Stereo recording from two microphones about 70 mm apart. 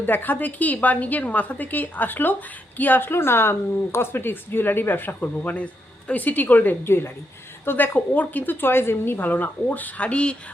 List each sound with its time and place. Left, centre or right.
0.0 s a woman's voice: left